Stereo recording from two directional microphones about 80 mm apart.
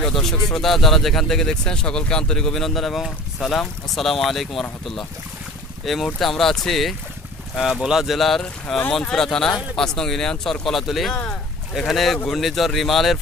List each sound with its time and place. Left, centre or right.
0.0 s speech: centre
6.1 s speech: centre